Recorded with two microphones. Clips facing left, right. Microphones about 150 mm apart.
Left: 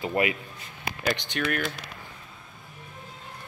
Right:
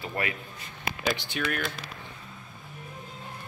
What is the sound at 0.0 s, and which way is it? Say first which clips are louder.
Speech: left 7 dB; 15° left (ahead or behind).